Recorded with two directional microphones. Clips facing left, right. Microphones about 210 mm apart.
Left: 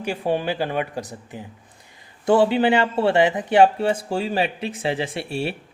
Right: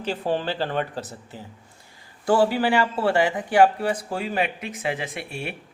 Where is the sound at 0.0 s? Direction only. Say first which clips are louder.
Left 2 dB; 10° left (ahead or behind).